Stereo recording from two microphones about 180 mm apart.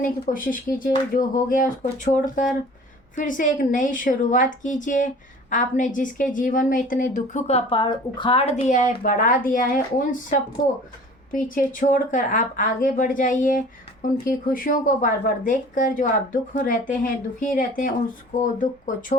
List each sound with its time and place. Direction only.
0.0 s a woman's voice: 50° left (ahead or behind)